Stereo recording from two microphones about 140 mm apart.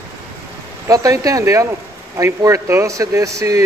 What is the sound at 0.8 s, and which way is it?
Speech, 25° right (ahead or behind).